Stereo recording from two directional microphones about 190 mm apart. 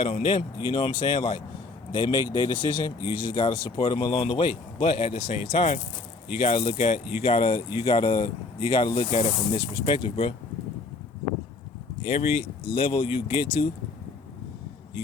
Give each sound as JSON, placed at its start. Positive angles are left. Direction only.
{"t": 0.0, "sound": "speech", "side_deg": 30}
{"t": 12.0, "sound": "speech", "side_deg": 30}